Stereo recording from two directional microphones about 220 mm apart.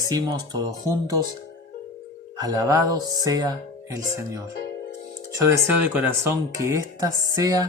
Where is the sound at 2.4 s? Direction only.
15° right (ahead or behind).